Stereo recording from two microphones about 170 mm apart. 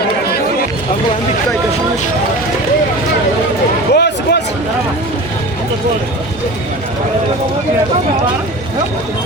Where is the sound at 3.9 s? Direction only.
75° left (ahead or behind).